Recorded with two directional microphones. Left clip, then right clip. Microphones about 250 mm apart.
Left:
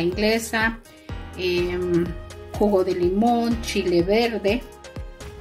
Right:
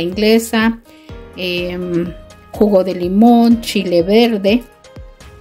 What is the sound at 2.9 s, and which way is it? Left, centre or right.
A woman's voice, right.